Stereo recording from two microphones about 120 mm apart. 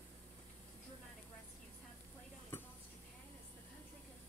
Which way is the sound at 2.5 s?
20° left (ahead or behind).